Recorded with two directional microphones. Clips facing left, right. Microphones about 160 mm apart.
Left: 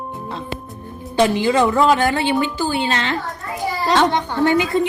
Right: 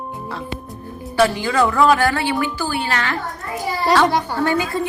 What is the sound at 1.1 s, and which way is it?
Speech, 20° left (ahead or behind).